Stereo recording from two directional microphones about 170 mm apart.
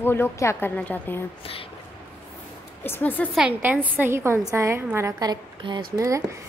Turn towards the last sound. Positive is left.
turn(degrees=-20)  # may be behind; listen again after turning